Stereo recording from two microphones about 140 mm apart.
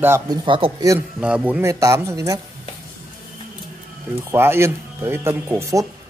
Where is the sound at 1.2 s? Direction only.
10° right (ahead or behind); by 2.4 s 25° right (ahead or behind).